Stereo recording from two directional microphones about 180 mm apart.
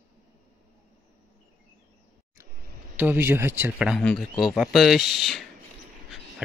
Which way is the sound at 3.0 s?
10° right (ahead or behind).